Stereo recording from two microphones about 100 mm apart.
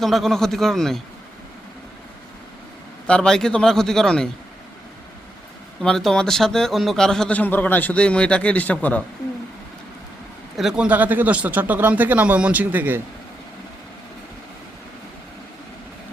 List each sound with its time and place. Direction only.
0.0 s a man's voice: centre (ahead or behind)
3.1 s a man's voice: 5° left (ahead or behind)
5.8 s a man's voice: 5° left (ahead or behind)
10.6 s speech: 5° right (ahead or behind)